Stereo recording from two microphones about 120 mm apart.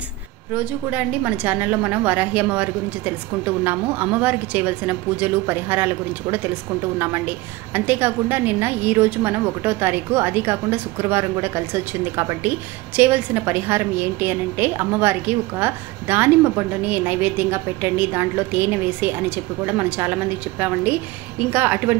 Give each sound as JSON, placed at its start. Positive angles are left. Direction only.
{"t": 0.6, "sound": "a woman's voice", "side_deg": -15}